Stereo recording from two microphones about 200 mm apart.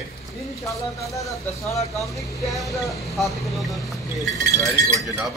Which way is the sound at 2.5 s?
Centre (ahead or behind).